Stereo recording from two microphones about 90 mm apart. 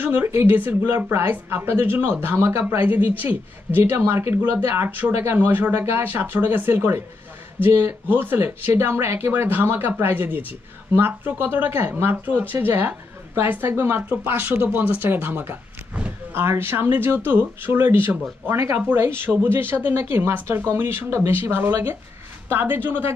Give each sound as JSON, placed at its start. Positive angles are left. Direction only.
{"t": 0.0, "sound": "speech", "side_deg": -25}